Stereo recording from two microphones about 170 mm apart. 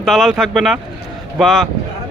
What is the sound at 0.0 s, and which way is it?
Speech, centre (ahead or behind).